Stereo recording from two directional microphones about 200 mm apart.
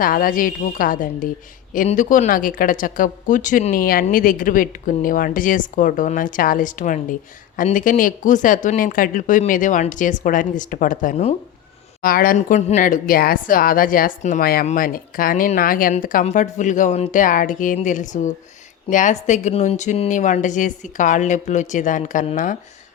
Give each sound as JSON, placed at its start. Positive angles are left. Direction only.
{"t": 0.0, "sound": "a woman's voice", "side_deg": 45}